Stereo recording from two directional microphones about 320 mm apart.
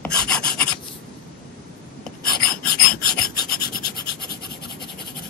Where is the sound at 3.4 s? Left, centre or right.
Left.